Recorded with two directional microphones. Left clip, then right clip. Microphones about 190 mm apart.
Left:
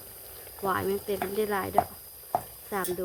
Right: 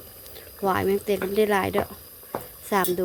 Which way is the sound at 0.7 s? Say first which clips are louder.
Right 6 dB; 30° right (ahead or behind).